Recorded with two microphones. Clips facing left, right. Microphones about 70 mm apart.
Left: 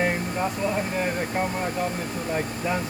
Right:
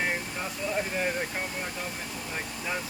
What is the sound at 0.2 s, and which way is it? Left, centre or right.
Speech, left.